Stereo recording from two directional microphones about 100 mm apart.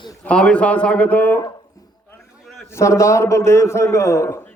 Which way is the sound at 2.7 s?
30° left (ahead or behind).